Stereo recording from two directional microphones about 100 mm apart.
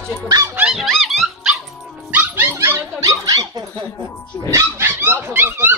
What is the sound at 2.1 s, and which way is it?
Dog, 20° right (ahead or behind).